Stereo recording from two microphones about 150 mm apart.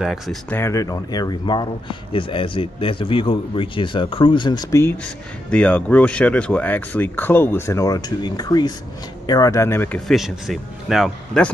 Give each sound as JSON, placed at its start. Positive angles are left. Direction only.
{"t": 0.0, "sound": "speech", "side_deg": 0}
{"t": 0.5, "sound": "speech", "side_deg": 15}
{"t": 5.0, "sound": "speech", "side_deg": 10}